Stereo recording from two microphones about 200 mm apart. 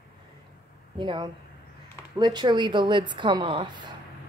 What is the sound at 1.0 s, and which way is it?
A woman's voice, 25° right (ahead or behind).